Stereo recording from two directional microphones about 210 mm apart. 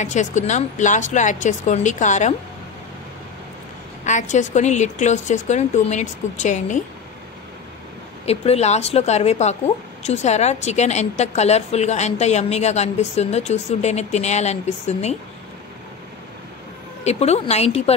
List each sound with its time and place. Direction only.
0.0 s a woman's voice: 35° left (ahead or behind)
4.0 s a woman's voice: 35° left (ahead or behind)
8.3 s a woman's voice: 30° left (ahead or behind)
17.0 s a woman's voice: 30° left (ahead or behind)